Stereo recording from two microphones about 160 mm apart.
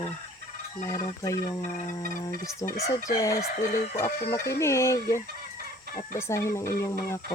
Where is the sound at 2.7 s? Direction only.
20° left (ahead or behind).